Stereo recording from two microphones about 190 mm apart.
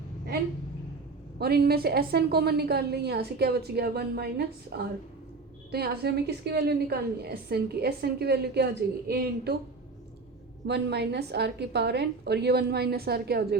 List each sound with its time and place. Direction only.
1.4 s a woman's voice: 55° right (ahead or behind)
10.7 s a woman's voice: 60° right (ahead or behind)